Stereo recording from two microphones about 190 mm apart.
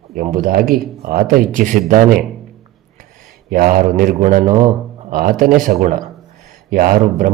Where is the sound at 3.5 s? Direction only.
50° right (ahead or behind).